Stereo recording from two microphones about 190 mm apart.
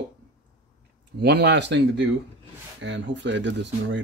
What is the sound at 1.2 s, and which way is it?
Speech, 65° right (ahead or behind).